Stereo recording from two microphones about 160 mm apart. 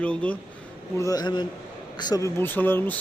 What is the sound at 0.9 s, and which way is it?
A man's voice, 20° left (ahead or behind).